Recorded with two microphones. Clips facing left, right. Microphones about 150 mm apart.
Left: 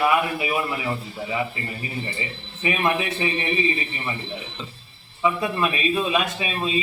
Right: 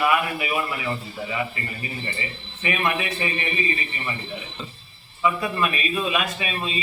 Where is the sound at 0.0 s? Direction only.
25° left (ahead or behind).